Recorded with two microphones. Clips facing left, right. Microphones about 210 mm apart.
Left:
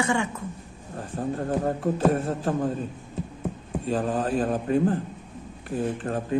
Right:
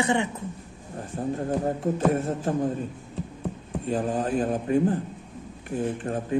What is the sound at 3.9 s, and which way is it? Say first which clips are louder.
A man's voice: even; 15° right (ahead or behind).